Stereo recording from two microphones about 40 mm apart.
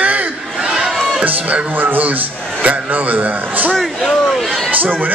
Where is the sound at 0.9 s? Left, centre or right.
Centre.